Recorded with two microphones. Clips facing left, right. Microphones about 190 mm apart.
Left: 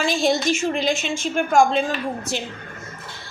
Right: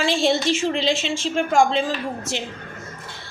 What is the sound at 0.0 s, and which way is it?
A woman's voice, 30° right (ahead or behind).